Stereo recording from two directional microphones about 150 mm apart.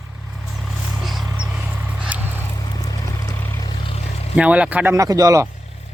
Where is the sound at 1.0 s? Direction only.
Centre (ahead or behind).